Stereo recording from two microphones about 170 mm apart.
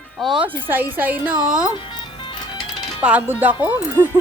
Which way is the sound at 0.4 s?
10° right (ahead or behind).